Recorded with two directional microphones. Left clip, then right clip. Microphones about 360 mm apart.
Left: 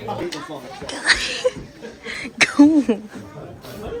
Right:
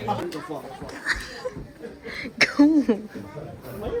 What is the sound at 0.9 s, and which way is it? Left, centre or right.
Speech, centre.